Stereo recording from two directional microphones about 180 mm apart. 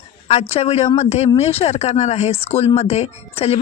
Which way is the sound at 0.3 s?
35° left (ahead or behind).